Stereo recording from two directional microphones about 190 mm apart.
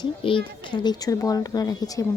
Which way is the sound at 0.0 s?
25° left (ahead or behind).